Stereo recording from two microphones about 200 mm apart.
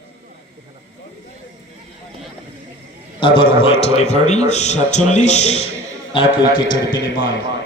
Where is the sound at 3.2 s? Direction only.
25° left (ahead or behind).